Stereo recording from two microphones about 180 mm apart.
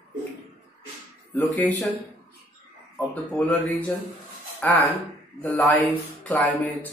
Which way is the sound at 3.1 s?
5° left (ahead or behind).